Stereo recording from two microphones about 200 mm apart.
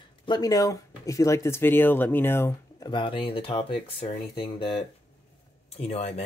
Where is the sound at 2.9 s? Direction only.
25° left (ahead or behind).